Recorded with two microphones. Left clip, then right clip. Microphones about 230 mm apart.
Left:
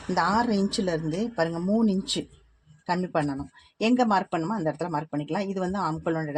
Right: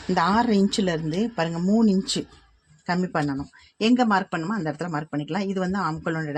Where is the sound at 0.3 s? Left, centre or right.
Right.